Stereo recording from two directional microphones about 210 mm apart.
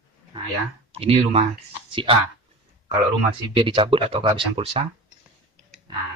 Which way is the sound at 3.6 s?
25° right (ahead or behind).